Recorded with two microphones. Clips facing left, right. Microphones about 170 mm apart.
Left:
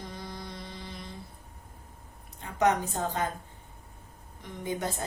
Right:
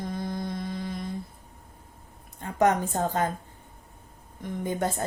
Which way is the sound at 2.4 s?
50° right (ahead or behind).